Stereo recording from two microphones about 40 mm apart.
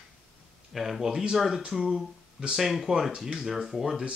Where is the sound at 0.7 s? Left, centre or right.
Centre.